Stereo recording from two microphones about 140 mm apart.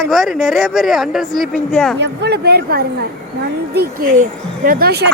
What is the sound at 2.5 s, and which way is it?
Speech, 90° right.